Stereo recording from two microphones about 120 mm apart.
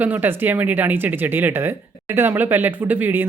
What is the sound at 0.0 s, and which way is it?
Speech, 15° right (ahead or behind).